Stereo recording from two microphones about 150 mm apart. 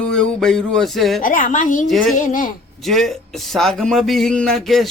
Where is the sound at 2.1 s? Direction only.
60° left (ahead or behind).